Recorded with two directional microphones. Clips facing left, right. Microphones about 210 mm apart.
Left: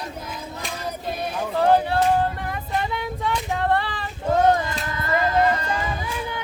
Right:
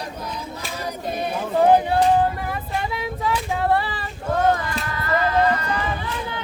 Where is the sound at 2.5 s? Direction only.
Centre (ahead or behind).